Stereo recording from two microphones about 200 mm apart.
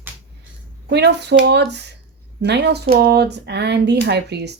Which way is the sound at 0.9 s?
55° right (ahead or behind).